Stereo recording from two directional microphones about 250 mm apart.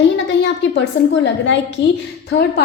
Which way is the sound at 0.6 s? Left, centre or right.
Left.